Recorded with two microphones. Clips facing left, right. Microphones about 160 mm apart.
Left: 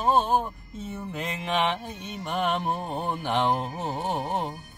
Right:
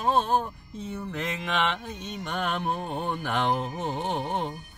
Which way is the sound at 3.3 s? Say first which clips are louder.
Left 2 dB; 35° left (ahead or behind).